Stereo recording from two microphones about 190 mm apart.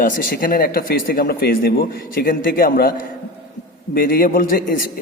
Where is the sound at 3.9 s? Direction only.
50° left (ahead or behind).